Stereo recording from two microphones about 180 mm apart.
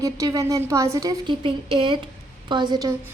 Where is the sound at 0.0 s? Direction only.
20° right (ahead or behind).